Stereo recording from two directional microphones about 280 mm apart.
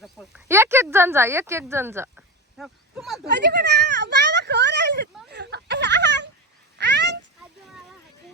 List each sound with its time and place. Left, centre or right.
0.0 s speech: centre
3.2 s speech: right
5.3 s a sound: right
6.7 s cat: right